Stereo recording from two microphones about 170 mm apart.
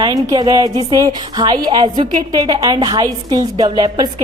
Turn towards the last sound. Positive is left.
turn(degrees=-25)  # may be behind; listen again after turning